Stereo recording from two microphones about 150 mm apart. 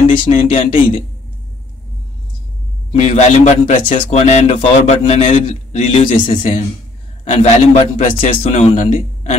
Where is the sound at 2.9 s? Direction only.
45° left (ahead or behind).